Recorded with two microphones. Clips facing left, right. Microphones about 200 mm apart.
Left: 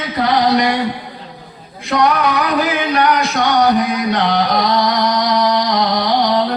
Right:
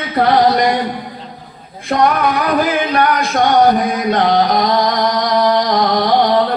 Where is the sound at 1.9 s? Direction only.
50° right (ahead or behind).